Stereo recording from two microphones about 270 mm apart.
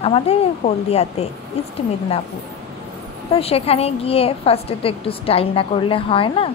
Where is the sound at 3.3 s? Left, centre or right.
Left.